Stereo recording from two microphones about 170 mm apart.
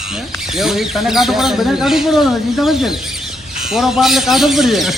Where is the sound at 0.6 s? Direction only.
Centre (ahead or behind).